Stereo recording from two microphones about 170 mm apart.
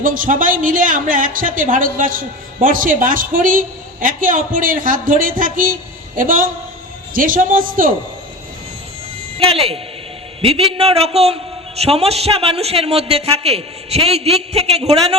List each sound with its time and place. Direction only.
0.0 s a man's voice: 50° right (ahead or behind)
9.4 s a man's voice: 35° right (ahead or behind)